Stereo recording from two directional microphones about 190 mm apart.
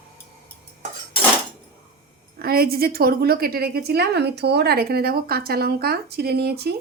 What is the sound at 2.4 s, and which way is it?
A woman's voice, 55° right (ahead or behind).